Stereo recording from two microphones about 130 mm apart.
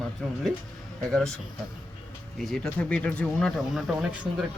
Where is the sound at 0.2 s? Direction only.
5° left (ahead or behind).